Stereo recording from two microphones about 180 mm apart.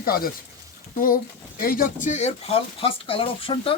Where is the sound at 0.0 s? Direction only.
55° left (ahead or behind).